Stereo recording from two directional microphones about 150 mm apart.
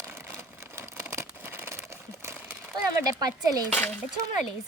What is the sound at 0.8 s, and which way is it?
Crumpling, 15° right (ahead or behind).